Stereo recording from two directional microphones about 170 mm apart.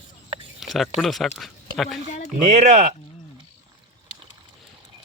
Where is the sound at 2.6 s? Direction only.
45° right (ahead or behind).